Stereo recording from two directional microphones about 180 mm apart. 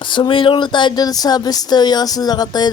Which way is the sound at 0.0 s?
25° left (ahead or behind).